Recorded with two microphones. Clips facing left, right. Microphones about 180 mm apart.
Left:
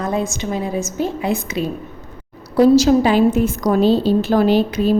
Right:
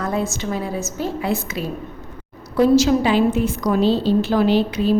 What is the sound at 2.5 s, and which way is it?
A woman's voice, 35° left (ahead or behind).